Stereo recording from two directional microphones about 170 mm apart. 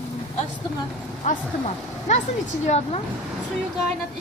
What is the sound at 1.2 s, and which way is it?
Speech, 45° left (ahead or behind).